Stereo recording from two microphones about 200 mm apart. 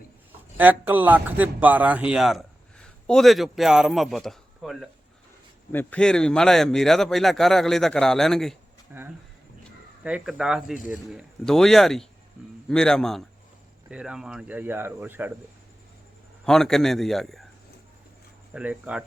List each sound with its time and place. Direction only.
0.5 s speech: 10° right (ahead or behind)
8.9 s a sound: 10° right (ahead or behind)
10.0 s speech: 5° right (ahead or behind)
16.5 s speech: centre (ahead or behind)
18.5 s speech: 5° right (ahead or behind)